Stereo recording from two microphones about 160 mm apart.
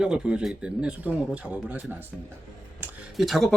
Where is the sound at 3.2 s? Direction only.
Centre (ahead or behind).